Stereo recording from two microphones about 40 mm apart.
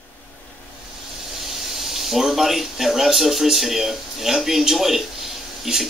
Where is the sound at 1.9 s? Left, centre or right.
Centre.